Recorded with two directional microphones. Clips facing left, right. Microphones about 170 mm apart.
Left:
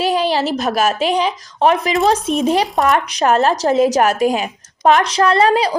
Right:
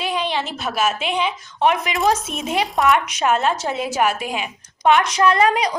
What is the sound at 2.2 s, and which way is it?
Speech, centre (ahead or behind).